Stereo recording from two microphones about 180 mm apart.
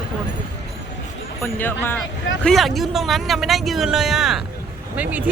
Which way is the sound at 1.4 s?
10° left (ahead or behind).